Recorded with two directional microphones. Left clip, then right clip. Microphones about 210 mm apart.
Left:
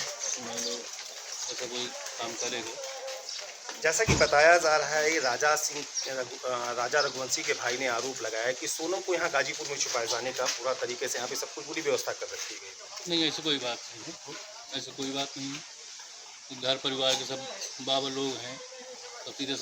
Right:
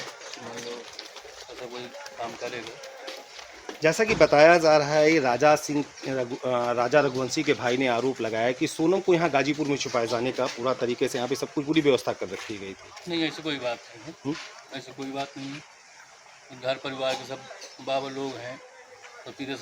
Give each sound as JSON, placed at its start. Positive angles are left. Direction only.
{"t": 2.4, "sound": "speech", "side_deg": -5}
{"t": 3.8, "sound": "speech", "side_deg": -50}
{"t": 13.1, "sound": "speech", "side_deg": -10}
{"t": 16.6, "sound": "speech", "side_deg": -10}